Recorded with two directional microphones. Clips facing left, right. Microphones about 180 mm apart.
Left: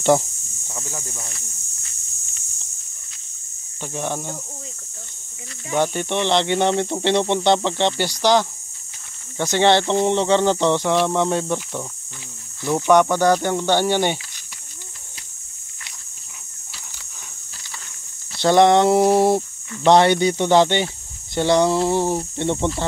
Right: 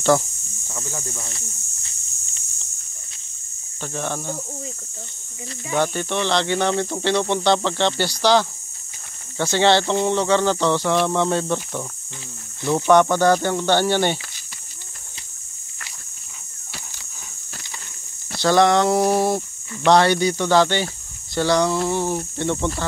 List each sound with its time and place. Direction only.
0.7 s speech: 15° left (ahead or behind)
3.8 s speech: 15° left (ahead or behind)
5.8 s speech: 20° left (ahead or behind)
18.4 s speech: 25° left (ahead or behind)